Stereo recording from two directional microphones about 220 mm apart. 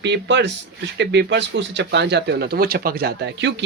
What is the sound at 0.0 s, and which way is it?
Speech, 55° right (ahead or behind).